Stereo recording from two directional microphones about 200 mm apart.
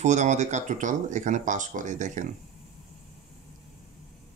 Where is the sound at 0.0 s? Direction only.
35° right (ahead or behind).